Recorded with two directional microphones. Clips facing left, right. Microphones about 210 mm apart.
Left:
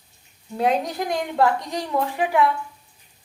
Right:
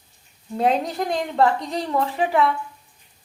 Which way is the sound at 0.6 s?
Centre (ahead or behind).